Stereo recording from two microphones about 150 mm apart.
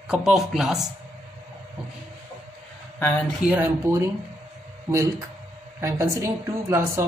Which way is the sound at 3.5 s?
15° right (ahead or behind).